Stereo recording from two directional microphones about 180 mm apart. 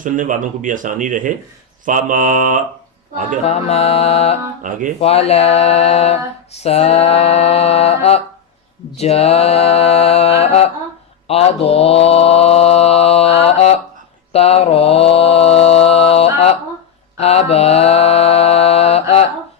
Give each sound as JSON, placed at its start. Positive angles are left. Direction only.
{"t": 0.0, "sound": "speech", "side_deg": -45}
{"t": 3.4, "sound": "a sound", "side_deg": 35}
{"t": 11.3, "sound": "mantra", "side_deg": 35}